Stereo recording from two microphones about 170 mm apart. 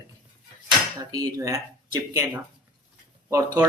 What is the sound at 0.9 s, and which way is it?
Speech, 20° right (ahead or behind).